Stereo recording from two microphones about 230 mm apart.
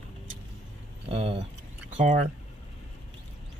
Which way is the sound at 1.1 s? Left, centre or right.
Right.